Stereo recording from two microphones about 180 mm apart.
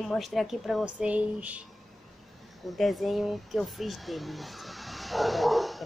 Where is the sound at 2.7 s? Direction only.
Centre (ahead or behind).